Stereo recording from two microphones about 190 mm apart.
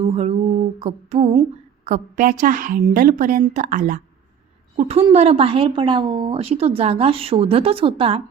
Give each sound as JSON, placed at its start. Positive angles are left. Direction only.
{"t": 0.0, "sound": "mantra", "side_deg": -30}
{"t": 0.8, "sound": "a sound", "side_deg": -35}
{"t": 1.8, "sound": "a woman's voice", "side_deg": -40}